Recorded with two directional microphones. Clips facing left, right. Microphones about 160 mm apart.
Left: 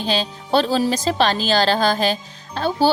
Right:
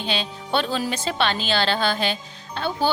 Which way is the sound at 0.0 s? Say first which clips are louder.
Left 5 dB; 40° left (ahead or behind).